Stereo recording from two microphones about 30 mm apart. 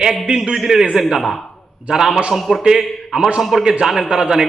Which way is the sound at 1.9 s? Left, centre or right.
Centre.